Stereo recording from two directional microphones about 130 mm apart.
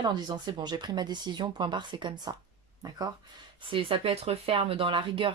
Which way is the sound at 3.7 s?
40° right (ahead or behind).